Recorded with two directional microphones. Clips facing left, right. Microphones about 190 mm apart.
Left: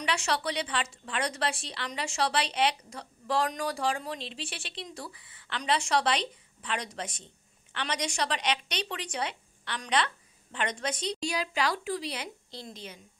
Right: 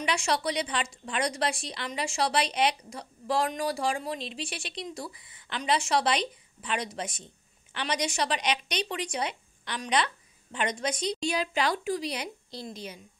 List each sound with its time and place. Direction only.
0.0 s a woman's voice: 10° right (ahead or behind)
11.1 s a woman's voice: 25° right (ahead or behind)